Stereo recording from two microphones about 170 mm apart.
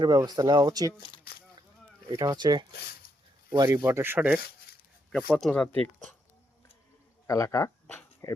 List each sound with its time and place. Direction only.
0.0 s speech: 25° right (ahead or behind)
2.0 s speech: 25° right (ahead or behind)
5.3 s speech: 10° left (ahead or behind)
7.3 s speech: 20° left (ahead or behind)